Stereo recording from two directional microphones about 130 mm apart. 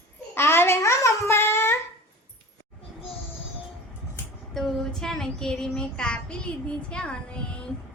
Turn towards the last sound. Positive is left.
turn(degrees=5)  # may be behind; listen again after turning